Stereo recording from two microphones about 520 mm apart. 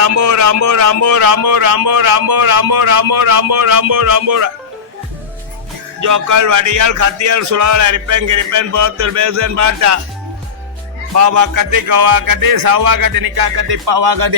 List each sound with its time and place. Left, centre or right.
0.0 s speech: right
6.0 s speech: right
11.1 s speech: right